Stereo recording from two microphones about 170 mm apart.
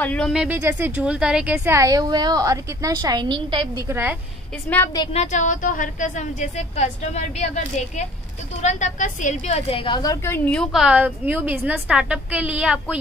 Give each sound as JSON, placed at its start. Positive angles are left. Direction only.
{"t": 0.0, "sound": "speech", "side_deg": 10}
{"t": 0.3, "sound": "speech", "side_deg": -5}
{"t": 3.9, "sound": "a woman's voice", "side_deg": -10}
{"t": 5.1, "sound": "a woman's voice", "side_deg": 45}
{"t": 10.2, "sound": "a woman's voice", "side_deg": 10}